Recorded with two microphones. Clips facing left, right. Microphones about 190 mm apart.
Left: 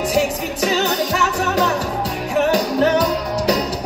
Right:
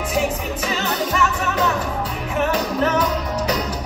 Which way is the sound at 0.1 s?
75° left (ahead or behind).